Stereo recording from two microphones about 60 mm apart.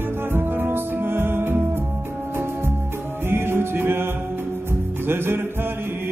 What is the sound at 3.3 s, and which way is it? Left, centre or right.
Music, right.